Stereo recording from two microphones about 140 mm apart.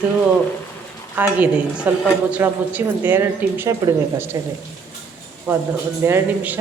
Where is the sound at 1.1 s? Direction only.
10° right (ahead or behind).